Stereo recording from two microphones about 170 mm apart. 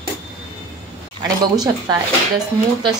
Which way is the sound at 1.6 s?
25° right (ahead or behind).